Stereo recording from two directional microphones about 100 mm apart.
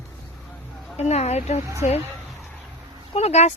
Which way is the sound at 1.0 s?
90° left.